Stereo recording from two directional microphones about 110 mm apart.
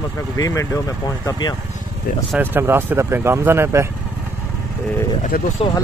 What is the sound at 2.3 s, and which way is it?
Speech, 20° right (ahead or behind).